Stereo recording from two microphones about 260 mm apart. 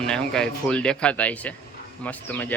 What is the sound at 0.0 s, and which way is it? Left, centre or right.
Speech, centre.